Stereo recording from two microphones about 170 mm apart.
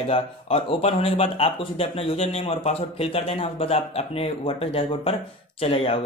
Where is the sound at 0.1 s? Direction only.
35° left (ahead or behind).